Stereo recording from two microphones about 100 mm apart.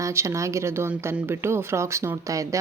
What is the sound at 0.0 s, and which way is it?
Speech, 30° right (ahead or behind).